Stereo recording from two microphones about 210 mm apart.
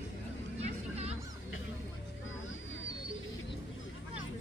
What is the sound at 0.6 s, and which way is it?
Vehicle, 30° right (ahead or behind).